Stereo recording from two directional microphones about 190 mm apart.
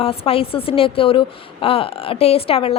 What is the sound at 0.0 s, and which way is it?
A woman's voice, 30° left (ahead or behind).